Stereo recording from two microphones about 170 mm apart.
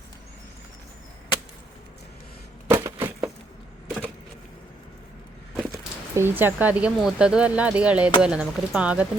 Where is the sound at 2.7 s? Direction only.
15° right (ahead or behind).